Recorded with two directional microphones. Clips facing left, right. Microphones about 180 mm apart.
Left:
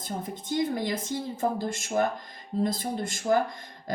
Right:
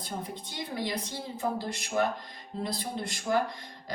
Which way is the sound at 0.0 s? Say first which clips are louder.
Left 3 dB; 45° left (ahead or behind).